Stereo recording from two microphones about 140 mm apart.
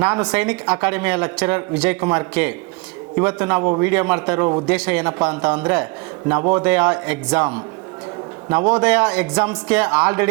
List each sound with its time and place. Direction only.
0.0 s speech: 10° right (ahead or behind)
3.6 s a man's voice: 25° right (ahead or behind)
3.8 s speech: 10° right (ahead or behind)